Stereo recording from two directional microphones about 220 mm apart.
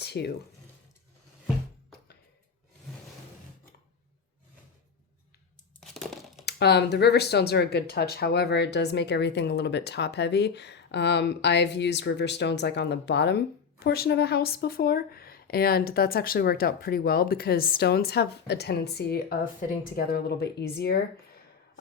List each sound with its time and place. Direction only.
0.0 s a sound: 50° left (ahead or behind)
5.8 s crumpling: centre (ahead or behind)
6.4 s speech: 50° left (ahead or behind)